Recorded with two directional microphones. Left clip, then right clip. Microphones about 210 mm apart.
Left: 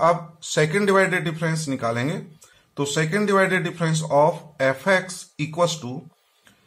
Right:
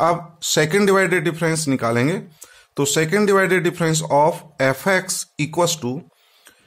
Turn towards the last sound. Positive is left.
turn(degrees=-45)  # may be behind; listen again after turning